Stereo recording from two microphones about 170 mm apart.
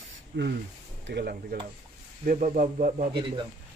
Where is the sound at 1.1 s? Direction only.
75° right (ahead or behind).